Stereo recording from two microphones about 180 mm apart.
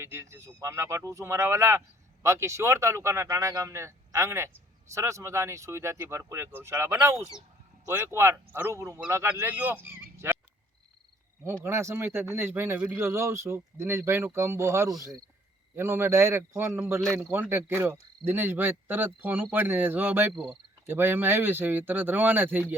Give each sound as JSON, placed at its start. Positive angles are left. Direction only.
{"t": 0.0, "sound": "speech", "side_deg": -15}
{"t": 11.6, "sound": "speech", "side_deg": -15}
{"t": 20.8, "sound": "speech", "side_deg": -10}